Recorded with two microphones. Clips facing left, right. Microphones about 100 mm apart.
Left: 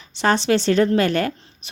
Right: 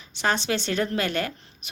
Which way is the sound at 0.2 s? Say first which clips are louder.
Left 7 dB; 35° left (ahead or behind).